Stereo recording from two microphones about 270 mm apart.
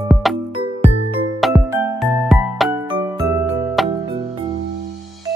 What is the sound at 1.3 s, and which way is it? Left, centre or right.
Music, centre.